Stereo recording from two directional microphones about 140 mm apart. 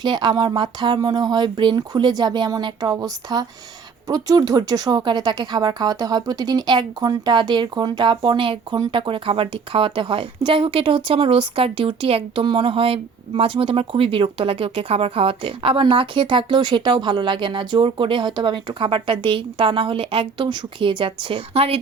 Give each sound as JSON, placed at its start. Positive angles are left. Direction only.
{"t": 0.0, "sound": "speech", "side_deg": -30}